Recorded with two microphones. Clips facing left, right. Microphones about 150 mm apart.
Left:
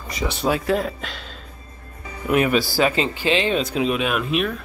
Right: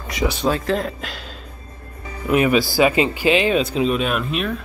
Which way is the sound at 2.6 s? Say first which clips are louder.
Right 3 dB; 15° right (ahead or behind).